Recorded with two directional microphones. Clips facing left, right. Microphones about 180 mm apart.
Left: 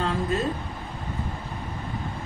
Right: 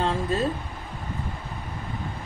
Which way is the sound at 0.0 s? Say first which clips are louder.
Right 1 dB; 30° right (ahead or behind).